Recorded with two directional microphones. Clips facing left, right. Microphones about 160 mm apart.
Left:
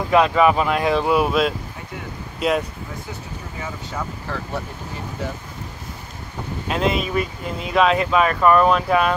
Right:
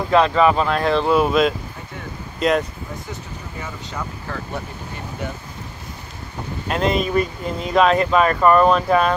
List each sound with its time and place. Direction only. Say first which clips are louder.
0.1 s speech: even; 10° left (ahead or behind)
6.7 s speech: right 2 dB; 5° left (ahead or behind)